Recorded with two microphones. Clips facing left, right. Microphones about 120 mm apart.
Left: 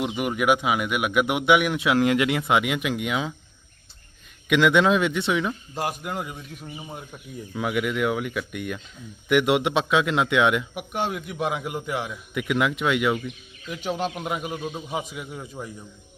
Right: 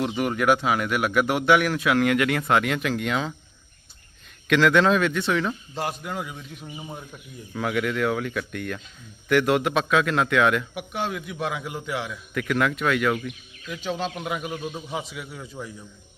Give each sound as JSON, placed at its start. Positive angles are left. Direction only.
{"t": 0.0, "sound": "speech", "side_deg": 10}
{"t": 4.4, "sound": "speech", "side_deg": 10}
{"t": 5.4, "sound": "speech", "side_deg": 10}
{"t": 7.5, "sound": "a man's voice", "side_deg": 10}
{"t": 15.4, "sound": "speech", "side_deg": 15}